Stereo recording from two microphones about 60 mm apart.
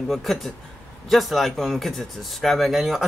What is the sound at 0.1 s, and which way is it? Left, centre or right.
Speech, centre.